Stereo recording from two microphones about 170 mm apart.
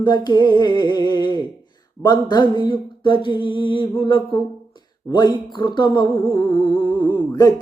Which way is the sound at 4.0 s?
30° left (ahead or behind).